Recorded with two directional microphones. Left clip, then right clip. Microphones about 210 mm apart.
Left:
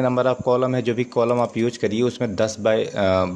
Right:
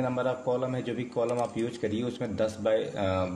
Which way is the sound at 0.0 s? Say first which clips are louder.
Left 9 dB; 50° left (ahead or behind).